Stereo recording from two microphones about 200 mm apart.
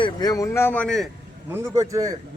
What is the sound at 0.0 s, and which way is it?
A man's voice, 20° left (ahead or behind).